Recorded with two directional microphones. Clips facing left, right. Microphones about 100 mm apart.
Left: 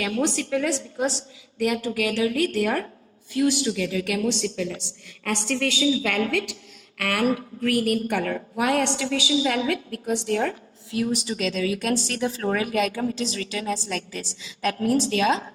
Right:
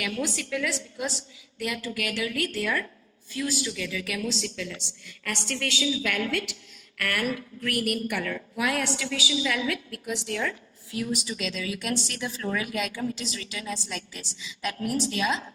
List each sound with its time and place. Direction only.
0.0 s a woman's voice: 35° left (ahead or behind)
2.5 s a woman's voice: 60° left (ahead or behind)
3.3 s a man's voice: 60° left (ahead or behind)
3.7 s a woman's voice: 40° left (ahead or behind)
9.2 s a woman's voice: 45° left (ahead or behind)